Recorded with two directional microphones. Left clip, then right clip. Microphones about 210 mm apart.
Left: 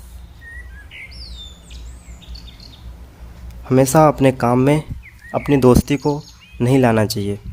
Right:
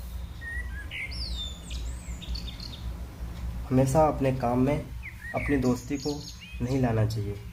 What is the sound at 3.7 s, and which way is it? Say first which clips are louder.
Speech: left 10 dB; 55° left (ahead or behind).